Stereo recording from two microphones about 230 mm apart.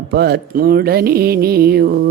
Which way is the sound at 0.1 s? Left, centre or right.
Right.